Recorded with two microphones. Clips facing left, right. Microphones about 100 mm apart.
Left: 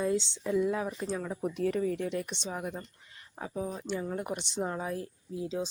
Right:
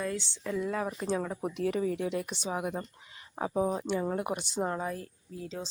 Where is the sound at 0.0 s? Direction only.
20° left (ahead or behind).